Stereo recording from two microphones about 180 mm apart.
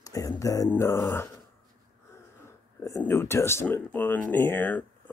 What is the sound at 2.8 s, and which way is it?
Speech, 15° left (ahead or behind).